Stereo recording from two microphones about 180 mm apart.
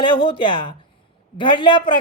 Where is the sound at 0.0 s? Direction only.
25° left (ahead or behind).